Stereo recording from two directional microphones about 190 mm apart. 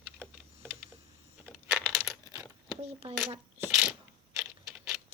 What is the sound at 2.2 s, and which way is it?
Coin, 15° right (ahead or behind).